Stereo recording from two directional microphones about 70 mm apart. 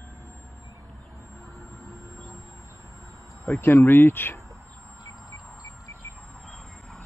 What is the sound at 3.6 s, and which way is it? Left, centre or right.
Speech, left.